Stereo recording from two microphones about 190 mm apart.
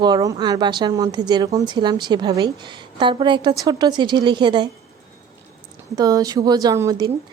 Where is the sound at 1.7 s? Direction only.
25° right (ahead or behind).